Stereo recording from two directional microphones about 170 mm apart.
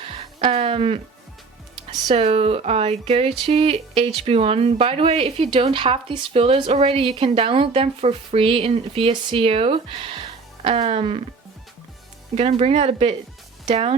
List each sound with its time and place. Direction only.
0.0 s music: 35° right (ahead or behind)
2.0 s speech: 35° right (ahead or behind)
12.3 s speech: 35° right (ahead or behind)